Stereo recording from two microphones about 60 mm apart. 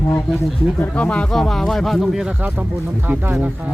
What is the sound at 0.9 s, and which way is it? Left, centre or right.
Speech, left.